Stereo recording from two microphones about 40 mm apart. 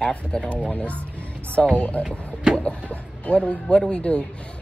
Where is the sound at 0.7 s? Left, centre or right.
Left.